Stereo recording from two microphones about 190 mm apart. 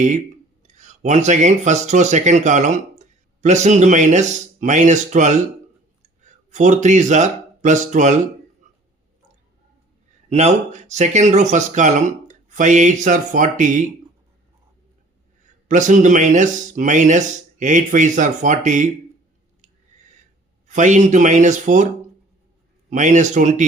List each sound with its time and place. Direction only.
0.7 s speech: 40° right (ahead or behind)
8.7 s a sound: 40° right (ahead or behind)
10.2 s speech: 35° right (ahead or behind)
15.7 s speech: 40° right (ahead or behind)
20.7 s speech: 40° right (ahead or behind)
22.9 s speech: 40° right (ahead or behind)